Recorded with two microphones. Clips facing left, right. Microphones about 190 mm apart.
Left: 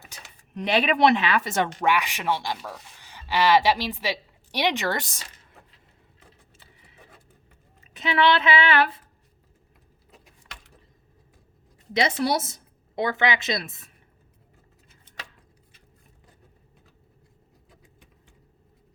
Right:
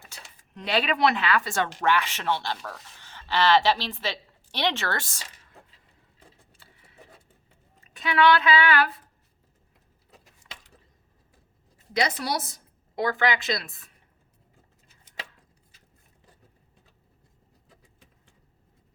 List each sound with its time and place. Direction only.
0.1 s speech: 20° left (ahead or behind)
6.5 s horse: 20° left (ahead or behind)
7.9 s speech: 20° left (ahead or behind)
11.9 s speech: 25° left (ahead or behind)